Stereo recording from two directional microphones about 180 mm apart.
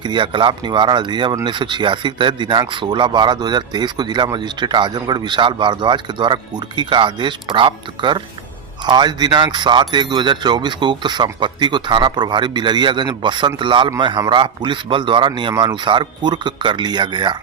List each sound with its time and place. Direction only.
0.0 s speech: 25° right (ahead or behind)